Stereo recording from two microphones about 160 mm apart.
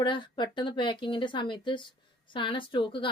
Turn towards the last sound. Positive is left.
turn(degrees=30)  # may be behind; listen again after turning